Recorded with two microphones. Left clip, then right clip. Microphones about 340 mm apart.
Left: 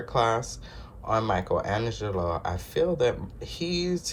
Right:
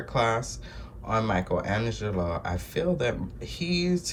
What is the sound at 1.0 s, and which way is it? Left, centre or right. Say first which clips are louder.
Speech: left 1 dB; centre.